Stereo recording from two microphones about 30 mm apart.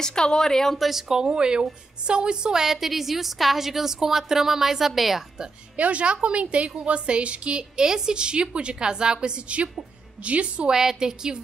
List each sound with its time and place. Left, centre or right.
0.0 s a woman's voice: left
0.7 s a woman's voice: centre
1.1 s a woman's voice: right
2.5 s a woman's voice: centre
5.8 s a woman's voice: right
7.8 s a woman's voice: right
10.2 s a woman's voice: right
10.7 s a woman's voice: centre